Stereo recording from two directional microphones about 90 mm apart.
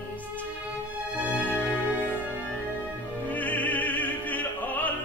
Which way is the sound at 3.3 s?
15° left (ahead or behind).